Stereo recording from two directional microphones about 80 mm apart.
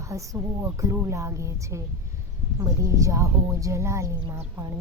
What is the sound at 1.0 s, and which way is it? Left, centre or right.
Speech, right.